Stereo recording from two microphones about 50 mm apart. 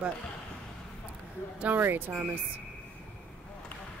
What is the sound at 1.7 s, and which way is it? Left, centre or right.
Speech, right.